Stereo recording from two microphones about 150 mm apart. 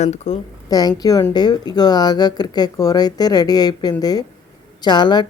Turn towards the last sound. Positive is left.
turn(degrees=30)  # may be behind; listen again after turning